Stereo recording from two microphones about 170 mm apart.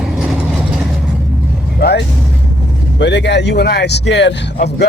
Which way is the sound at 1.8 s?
70° left (ahead or behind).